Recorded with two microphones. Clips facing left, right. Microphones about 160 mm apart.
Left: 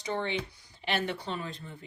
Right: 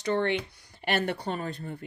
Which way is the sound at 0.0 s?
65° right (ahead or behind).